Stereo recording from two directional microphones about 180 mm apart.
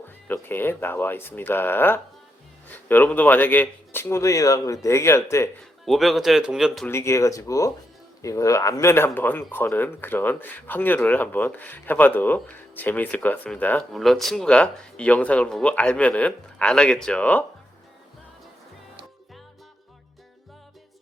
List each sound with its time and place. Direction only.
0.3 s speech: 10° left (ahead or behind)
5.8 s speech: centre (ahead or behind)
6.8 s speech: 15° left (ahead or behind)